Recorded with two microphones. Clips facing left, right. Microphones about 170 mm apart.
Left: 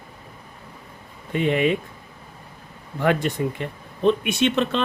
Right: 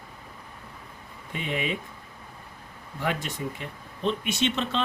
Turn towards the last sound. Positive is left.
turn(degrees=60)  # may be behind; listen again after turning